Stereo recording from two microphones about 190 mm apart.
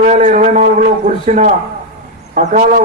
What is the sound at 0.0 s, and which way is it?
A man's voice, 40° right (ahead or behind).